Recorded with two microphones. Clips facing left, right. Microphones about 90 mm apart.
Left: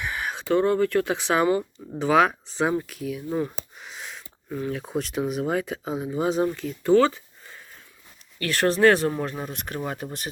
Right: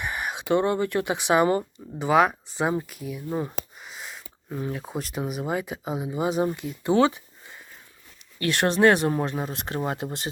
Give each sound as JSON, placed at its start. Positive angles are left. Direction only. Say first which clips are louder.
{"t": 0.1, "sound": "speech", "louder": "even", "side_deg": -10}
{"t": 3.8, "sound": "a sound", "louder": "left 1 dB", "side_deg": -5}
{"t": 4.4, "sound": "speech", "louder": "left 2 dB", "side_deg": -15}
{"t": 4.7, "sound": "speech", "louder": "left 3 dB", "side_deg": 0}
{"t": 9.1, "sound": "speech", "louder": "right 2 dB", "side_deg": -35}